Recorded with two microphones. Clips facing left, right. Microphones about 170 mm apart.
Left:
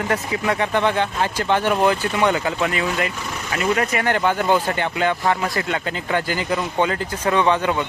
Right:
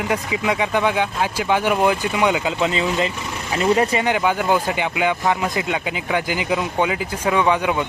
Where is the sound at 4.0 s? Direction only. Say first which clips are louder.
Even; 10° right (ahead or behind).